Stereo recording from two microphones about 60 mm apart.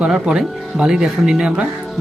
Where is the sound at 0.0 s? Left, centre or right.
Centre.